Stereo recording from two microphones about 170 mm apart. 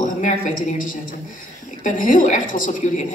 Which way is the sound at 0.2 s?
45° left (ahead or behind).